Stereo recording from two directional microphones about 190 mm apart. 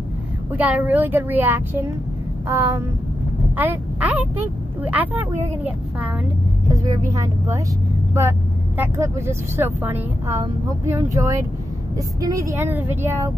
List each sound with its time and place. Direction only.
0.5 s speech: 10° right (ahead or behind)
6.7 s speech: 20° right (ahead or behind)